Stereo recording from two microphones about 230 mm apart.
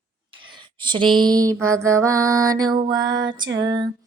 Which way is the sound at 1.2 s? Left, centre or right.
Centre.